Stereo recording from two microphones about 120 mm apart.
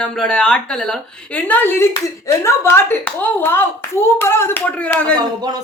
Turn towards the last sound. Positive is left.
turn(degrees=-35)  # may be behind; listen again after turning